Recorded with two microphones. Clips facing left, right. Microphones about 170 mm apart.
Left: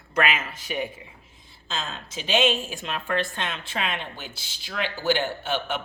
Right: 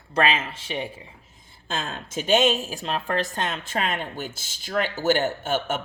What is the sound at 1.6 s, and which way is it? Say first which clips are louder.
A woman's voice: right 3 dB; 55° right (ahead or behind).